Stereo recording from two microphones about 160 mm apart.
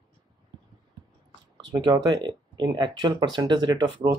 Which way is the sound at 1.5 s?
25° right (ahead or behind).